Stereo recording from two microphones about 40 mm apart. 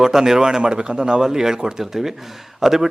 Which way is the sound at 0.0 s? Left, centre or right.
Centre.